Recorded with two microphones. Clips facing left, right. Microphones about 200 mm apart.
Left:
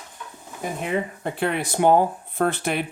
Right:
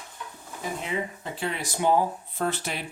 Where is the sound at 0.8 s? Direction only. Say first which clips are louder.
Left 9 dB; 60° left (ahead or behind).